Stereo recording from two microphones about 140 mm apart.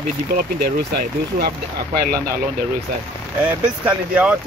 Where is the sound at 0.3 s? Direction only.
90° right.